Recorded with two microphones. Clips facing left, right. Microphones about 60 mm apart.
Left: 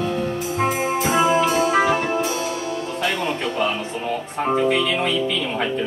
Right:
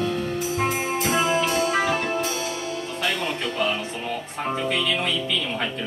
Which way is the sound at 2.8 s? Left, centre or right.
Centre.